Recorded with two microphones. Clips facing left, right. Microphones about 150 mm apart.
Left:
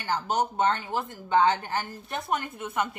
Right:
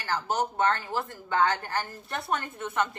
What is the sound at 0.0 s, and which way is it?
Speech, 15° left (ahead or behind).